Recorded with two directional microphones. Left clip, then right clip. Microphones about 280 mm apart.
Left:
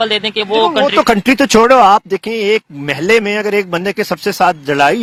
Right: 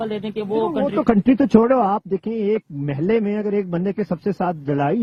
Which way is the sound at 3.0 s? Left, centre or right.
Centre.